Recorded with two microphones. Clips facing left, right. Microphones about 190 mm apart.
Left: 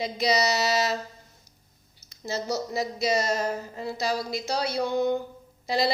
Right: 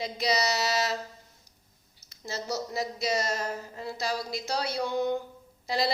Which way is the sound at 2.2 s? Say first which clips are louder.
Left 4 dB; 20° left (ahead or behind).